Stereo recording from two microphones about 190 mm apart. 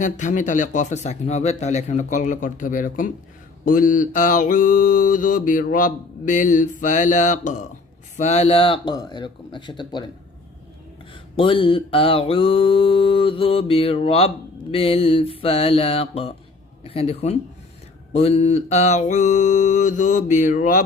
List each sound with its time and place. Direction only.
0.0 s speech: 40° left (ahead or behind)
3.7 s mantra: 45° left (ahead or behind); by 10.1 s 25° left (ahead or behind)
11.1 s mantra: 25° left (ahead or behind)
14.7 s speech: 30° left (ahead or behind)